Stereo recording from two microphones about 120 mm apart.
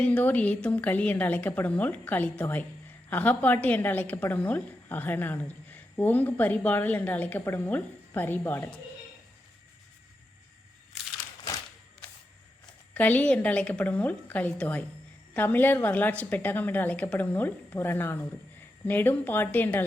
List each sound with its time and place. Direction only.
0.0 s a woman's voice: 15° left (ahead or behind)
12.9 s a woman's voice: 15° left (ahead or behind)